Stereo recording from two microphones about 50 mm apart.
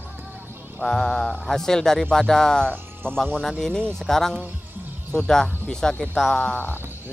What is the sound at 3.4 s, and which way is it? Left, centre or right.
Speech, centre.